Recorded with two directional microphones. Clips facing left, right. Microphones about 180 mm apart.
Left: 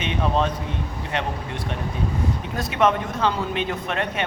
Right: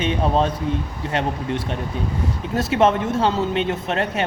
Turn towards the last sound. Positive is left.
turn(degrees=-35)  # may be behind; listen again after turning